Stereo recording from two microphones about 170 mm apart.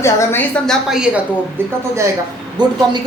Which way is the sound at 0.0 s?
15° left (ahead or behind).